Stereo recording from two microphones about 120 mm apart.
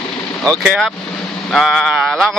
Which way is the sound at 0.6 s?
Centre (ahead or behind).